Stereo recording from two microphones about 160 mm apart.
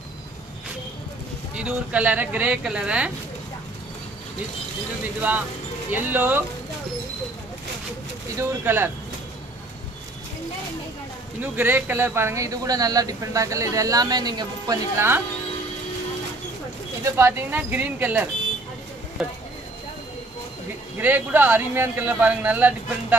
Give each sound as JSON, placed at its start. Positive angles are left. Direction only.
{"t": 1.5, "sound": "speech", "side_deg": -5}
{"t": 5.2, "sound": "speech", "side_deg": -10}
{"t": 8.4, "sound": "speech", "side_deg": -10}
{"t": 11.4, "sound": "speech", "side_deg": -10}
{"t": 15.0, "sound": "speech", "side_deg": -15}
{"t": 17.0, "sound": "speech", "side_deg": -15}
{"t": 21.0, "sound": "speech", "side_deg": -10}